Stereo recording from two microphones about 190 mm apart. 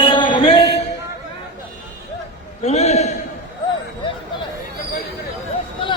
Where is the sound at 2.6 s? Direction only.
35° left (ahead or behind).